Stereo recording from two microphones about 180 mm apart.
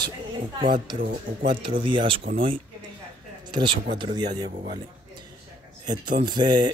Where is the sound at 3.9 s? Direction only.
25° right (ahead or behind).